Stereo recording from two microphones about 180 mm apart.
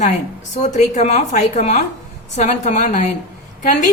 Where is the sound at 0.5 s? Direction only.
40° left (ahead or behind).